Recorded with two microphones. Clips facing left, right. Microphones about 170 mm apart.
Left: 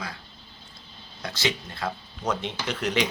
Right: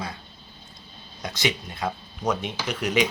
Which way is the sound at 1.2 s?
20° right (ahead or behind).